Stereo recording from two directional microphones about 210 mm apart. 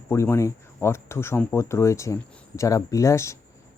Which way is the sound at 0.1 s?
15° left (ahead or behind).